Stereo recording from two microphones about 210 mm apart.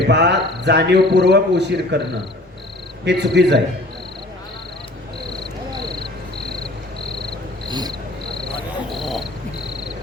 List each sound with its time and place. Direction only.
0.1 s a sound: 55° right (ahead or behind)
3.0 s speech: 55° right (ahead or behind)
5.7 s cricket: 20° right (ahead or behind)
7.7 s cricket: 20° right (ahead or behind)
8.9 s cricket: centre (ahead or behind)